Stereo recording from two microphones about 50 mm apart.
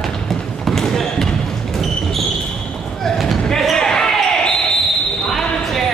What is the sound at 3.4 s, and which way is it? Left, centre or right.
Basketball bounce, centre.